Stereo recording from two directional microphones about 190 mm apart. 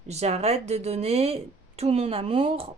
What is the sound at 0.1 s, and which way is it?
A woman's voice, 35° right (ahead or behind).